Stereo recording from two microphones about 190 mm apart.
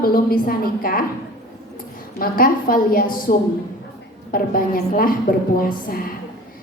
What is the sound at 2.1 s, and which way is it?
A woman's voice, 50° left (ahead or behind).